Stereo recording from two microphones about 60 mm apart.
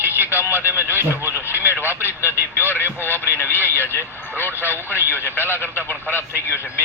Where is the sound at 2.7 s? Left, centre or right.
Left.